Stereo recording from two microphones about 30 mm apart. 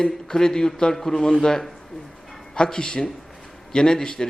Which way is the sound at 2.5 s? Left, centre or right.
Left.